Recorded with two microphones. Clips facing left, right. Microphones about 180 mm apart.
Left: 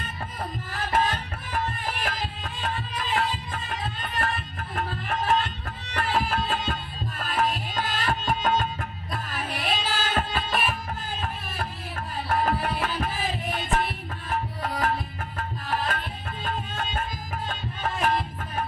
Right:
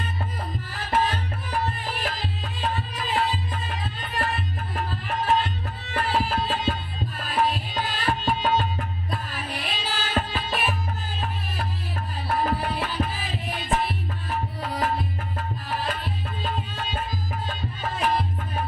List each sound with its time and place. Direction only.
0.9 s music: 50° left (ahead or behind)
2.9 s music: 45° right (ahead or behind)
3.2 s music: 45° left (ahead or behind)
12.3 s music: 50° left (ahead or behind)